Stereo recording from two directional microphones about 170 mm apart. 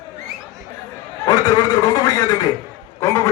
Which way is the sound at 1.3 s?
20° left (ahead or behind).